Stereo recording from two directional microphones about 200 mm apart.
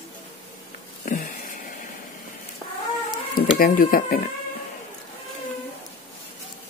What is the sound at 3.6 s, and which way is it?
Speech, 45° left (ahead or behind).